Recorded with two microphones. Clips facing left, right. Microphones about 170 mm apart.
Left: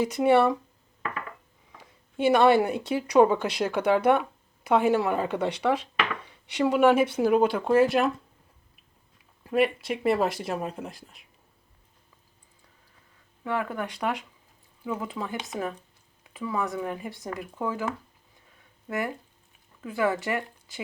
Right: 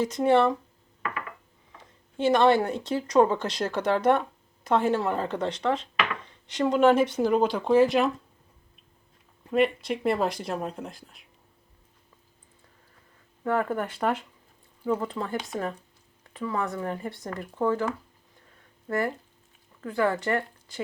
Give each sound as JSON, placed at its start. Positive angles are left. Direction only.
{"t": 0.0, "sound": "speech", "side_deg": 10}
{"t": 1.8, "sound": "speech", "side_deg": 10}
{"t": 9.4, "sound": "speech", "side_deg": 5}
{"t": 13.4, "sound": "speech", "side_deg": 5}
{"t": 18.9, "sound": "speech", "side_deg": 15}
{"t": 19.8, "sound": "speech", "side_deg": 5}